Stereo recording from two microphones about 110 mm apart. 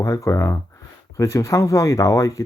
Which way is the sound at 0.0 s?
30° left (ahead or behind).